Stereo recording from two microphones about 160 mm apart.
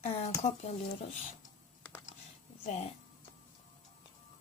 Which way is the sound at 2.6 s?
45° left (ahead or behind).